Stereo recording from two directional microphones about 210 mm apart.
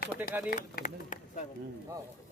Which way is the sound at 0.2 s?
10° right (ahead or behind).